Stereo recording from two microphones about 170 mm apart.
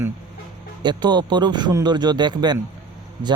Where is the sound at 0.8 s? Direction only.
25° right (ahead or behind).